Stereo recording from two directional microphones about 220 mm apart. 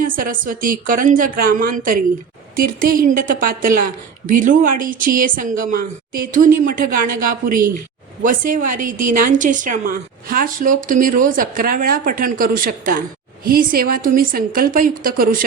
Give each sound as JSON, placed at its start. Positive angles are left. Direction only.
{"t": 0.0, "sound": "a woman's voice", "side_deg": -40}